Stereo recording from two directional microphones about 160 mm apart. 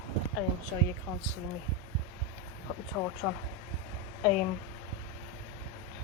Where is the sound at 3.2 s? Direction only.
Centre (ahead or behind).